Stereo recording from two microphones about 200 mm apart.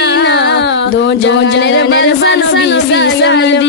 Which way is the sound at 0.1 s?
55° left (ahead or behind).